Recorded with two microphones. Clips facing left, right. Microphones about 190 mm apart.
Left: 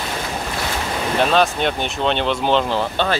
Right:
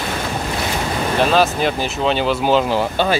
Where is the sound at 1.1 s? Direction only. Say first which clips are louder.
Right 1 dB; centre (ahead or behind).